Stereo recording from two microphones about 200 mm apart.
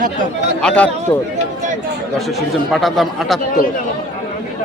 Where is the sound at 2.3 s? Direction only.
Centre (ahead or behind).